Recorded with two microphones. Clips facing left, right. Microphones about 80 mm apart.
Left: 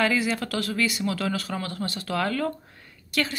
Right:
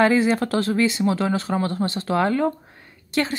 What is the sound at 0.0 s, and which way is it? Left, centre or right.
Speech, right.